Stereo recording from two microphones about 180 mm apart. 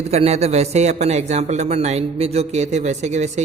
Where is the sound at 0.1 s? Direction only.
35° right (ahead or behind).